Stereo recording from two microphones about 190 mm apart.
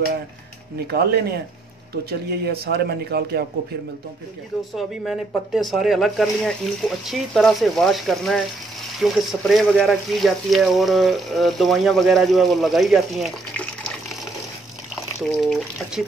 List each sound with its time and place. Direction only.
0.7 s speech: 55° right (ahead or behind)
4.7 s speech: centre (ahead or behind)
15.2 s speech: centre (ahead or behind)